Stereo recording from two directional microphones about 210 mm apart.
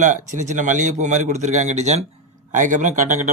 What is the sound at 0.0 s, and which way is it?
Speech, 35° right (ahead or behind).